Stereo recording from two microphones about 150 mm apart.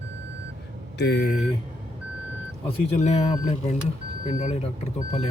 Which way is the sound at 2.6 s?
45° left (ahead or behind).